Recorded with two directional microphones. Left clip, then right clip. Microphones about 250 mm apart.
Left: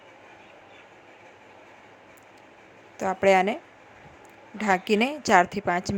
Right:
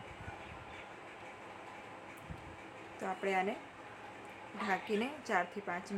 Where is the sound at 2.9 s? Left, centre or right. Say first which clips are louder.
Left 15 dB; left.